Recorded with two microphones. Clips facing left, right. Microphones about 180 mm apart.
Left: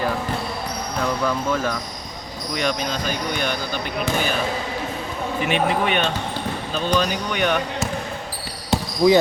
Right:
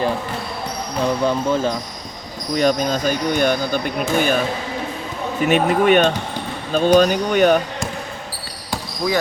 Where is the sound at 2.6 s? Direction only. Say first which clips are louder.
Right 7 dB; 40° right (ahead or behind).